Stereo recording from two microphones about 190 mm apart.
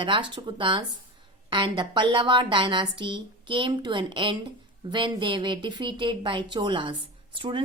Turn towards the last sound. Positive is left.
turn(degrees=-25)  # may be behind; listen again after turning